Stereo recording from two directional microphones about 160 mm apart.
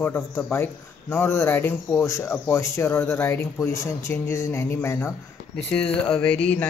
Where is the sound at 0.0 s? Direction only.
15° left (ahead or behind).